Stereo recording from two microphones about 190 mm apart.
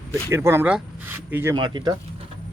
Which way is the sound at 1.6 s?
25° right (ahead or behind).